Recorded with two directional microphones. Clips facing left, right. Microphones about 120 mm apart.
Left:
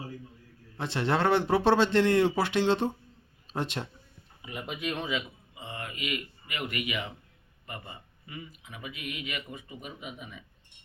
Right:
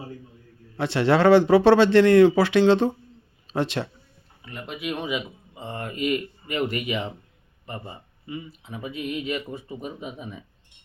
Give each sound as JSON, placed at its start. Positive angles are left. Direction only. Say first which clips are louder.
{"t": 0.8, "sound": "speech", "louder": "right 8 dB", "side_deg": -85}
{"t": 4.4, "sound": "speech", "louder": "right 3 dB", "side_deg": 5}
{"t": 5.5, "sound": "speech", "louder": "right 8 dB", "side_deg": -40}